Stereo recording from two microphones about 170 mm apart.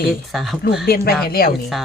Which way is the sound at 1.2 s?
60° left (ahead or behind).